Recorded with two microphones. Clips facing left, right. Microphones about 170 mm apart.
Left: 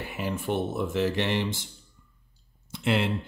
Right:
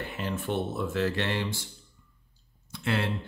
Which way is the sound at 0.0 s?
10° left (ahead or behind).